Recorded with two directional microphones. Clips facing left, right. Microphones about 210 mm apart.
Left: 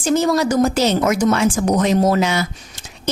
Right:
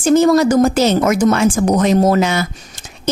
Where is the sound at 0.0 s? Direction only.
50° right (ahead or behind).